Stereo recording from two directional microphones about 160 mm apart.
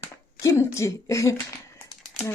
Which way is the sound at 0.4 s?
20° left (ahead or behind).